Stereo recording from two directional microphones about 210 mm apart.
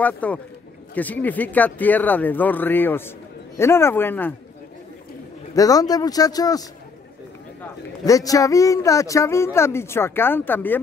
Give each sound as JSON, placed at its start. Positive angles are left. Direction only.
{"t": 0.0, "sound": "speech", "side_deg": 5}
{"t": 5.5, "sound": "speech", "side_deg": 15}
{"t": 8.0, "sound": "speech", "side_deg": 15}